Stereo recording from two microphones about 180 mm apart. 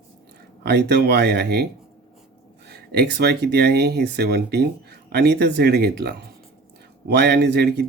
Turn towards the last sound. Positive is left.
turn(degrees=-65)  # may be behind; listen again after turning